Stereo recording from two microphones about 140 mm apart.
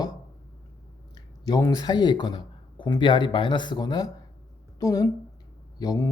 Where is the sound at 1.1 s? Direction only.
30° left (ahead or behind).